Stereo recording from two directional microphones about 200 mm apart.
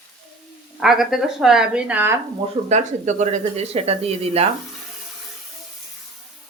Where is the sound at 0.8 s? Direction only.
Centre (ahead or behind).